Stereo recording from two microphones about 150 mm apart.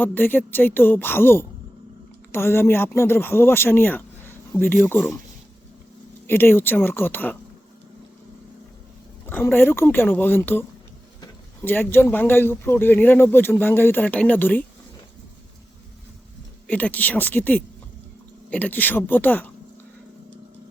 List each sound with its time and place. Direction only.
0.0 s speech: 10° left (ahead or behind)
6.2 s speech: 15° left (ahead or behind)
9.2 s speech: 15° left (ahead or behind)
16.6 s speech: 10° left (ahead or behind)